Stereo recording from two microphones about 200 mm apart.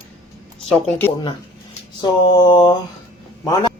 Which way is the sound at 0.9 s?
10° left (ahead or behind).